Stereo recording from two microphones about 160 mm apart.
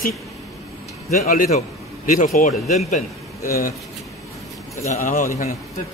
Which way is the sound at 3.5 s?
65° left (ahead or behind).